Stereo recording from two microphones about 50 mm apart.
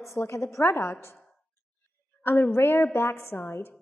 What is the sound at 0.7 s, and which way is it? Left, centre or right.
Speech, left.